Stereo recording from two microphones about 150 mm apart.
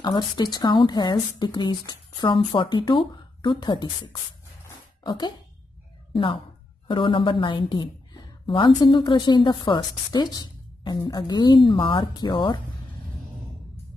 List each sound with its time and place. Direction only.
0.0 s a woman's voice: 30° left (ahead or behind)